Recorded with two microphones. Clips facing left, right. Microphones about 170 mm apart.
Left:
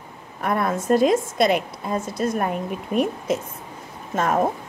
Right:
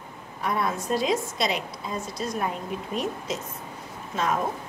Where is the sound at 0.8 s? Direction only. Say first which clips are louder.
Left 11 dB; 50° left (ahead or behind).